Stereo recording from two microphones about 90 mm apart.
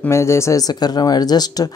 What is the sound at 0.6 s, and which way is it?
Speech, 50° left (ahead or behind).